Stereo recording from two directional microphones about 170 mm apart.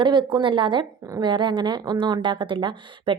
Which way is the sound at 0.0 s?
30° right (ahead or behind).